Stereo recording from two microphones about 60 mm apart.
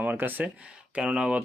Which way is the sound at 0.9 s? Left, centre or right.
Centre.